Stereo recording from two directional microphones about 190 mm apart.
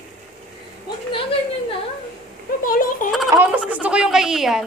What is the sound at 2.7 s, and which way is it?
Speech, 45° left (ahead or behind).